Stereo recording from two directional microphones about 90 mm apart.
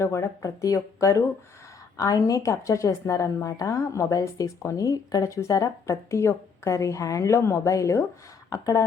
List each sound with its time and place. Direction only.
0.0 s a woman's voice: 30° left (ahead or behind)